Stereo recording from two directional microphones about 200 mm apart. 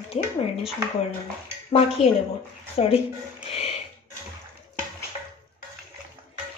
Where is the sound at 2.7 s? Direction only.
30° left (ahead or behind).